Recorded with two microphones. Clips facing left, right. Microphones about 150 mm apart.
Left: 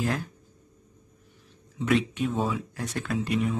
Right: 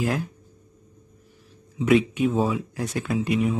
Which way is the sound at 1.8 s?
5° right (ahead or behind).